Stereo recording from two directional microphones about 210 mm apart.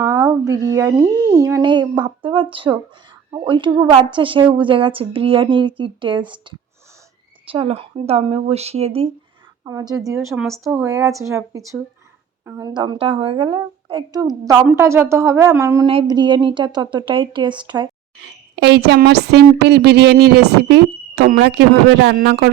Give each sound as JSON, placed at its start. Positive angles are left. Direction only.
{"t": 0.0, "sound": "a woman's voice", "side_deg": -15}
{"t": 7.5, "sound": "a woman's voice", "side_deg": -25}
{"t": 9.6, "sound": "speech", "side_deg": -15}
{"t": 10.3, "sound": "speech", "side_deg": 0}
{"t": 10.7, "sound": "a woman's voice", "side_deg": -10}
{"t": 18.2, "sound": "a woman's voice", "side_deg": -55}